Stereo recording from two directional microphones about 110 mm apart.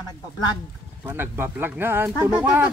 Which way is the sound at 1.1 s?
20° right (ahead or behind).